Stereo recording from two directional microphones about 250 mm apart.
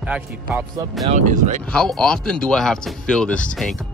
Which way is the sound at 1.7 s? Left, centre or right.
Centre.